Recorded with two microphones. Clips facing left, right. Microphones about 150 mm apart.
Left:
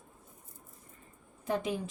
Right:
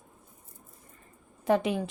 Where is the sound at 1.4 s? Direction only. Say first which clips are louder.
Right 7 dB; 75° right (ahead or behind).